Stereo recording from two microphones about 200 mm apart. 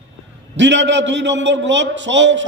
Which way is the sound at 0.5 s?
65° right (ahead or behind).